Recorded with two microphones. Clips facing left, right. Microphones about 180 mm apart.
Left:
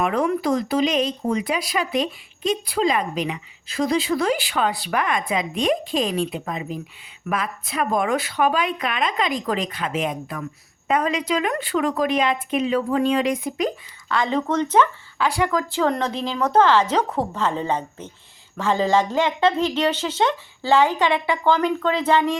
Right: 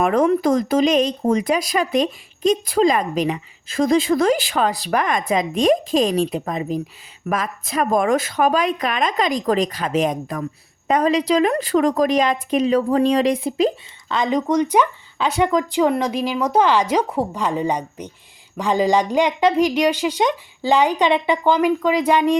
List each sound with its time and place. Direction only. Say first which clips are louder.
0.0 s a woman's voice: right 5 dB; 45° right (ahead or behind); by 22.4 s 15° right (ahead or behind)